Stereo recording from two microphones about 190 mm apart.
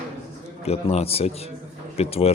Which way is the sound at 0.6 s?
35° left (ahead or behind).